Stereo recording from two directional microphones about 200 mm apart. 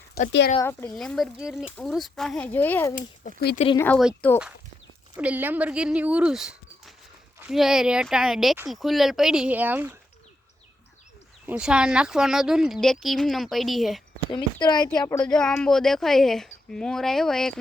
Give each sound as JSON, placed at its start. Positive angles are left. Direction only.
{"t": 0.1, "sound": "speech", "side_deg": 55}
{"t": 0.6, "sound": "a child's voice", "side_deg": 10}
{"t": 5.1, "sound": "speech", "side_deg": -10}
{"t": 11.4, "sound": "speech", "side_deg": -5}
{"t": 14.3, "sound": "speech", "side_deg": 20}
{"t": 14.8, "sound": "a child's voice", "side_deg": 10}